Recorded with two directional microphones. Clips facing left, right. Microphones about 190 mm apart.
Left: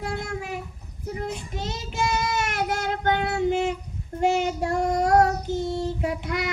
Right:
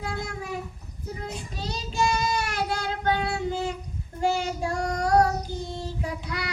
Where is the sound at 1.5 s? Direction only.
20° left (ahead or behind).